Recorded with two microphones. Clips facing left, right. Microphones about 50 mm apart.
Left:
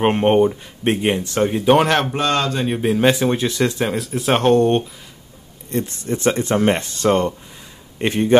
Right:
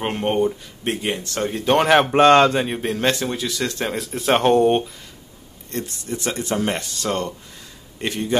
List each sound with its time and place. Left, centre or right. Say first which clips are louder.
0.0 s speech: left 6 dB; left
1.8 s speech: right 1 dB; centre
2.1 s speech: right 7 dB; right
2.6 s speech: left 5 dB; centre
3.3 s speech: left 6 dB; left
3.7 s speech: left 4 dB; centre
5.9 s speech: left 9 dB; left